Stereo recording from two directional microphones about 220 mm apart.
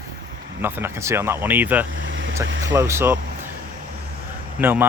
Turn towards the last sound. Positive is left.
turn(degrees=-10)  # may be behind; listen again after turning